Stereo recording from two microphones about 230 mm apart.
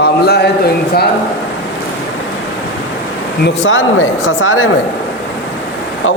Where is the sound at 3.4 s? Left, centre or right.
Left.